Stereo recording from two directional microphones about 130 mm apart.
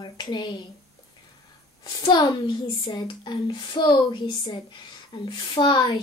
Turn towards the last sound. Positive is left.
turn(degrees=40)  # may be behind; listen again after turning